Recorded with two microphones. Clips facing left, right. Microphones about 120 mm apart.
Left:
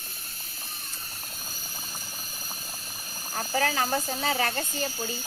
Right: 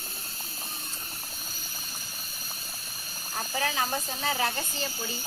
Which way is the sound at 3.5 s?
50° left (ahead or behind).